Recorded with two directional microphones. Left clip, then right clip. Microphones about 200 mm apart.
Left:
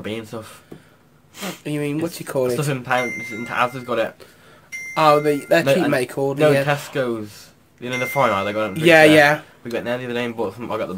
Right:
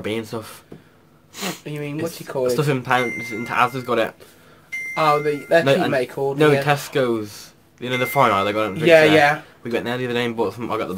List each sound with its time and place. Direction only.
0.0 s speech: 25° right (ahead or behind)
1.6 s speech: 55° left (ahead or behind)
2.5 s speech: 25° right (ahead or behind)
4.9 s speech: 50° left (ahead or behind)
6.6 s speech: 25° right (ahead or behind)
8.8 s speech: 55° left (ahead or behind)
9.6 s speech: 25° right (ahead or behind)